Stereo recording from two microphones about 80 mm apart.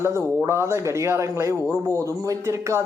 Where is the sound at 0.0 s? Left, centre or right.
Right.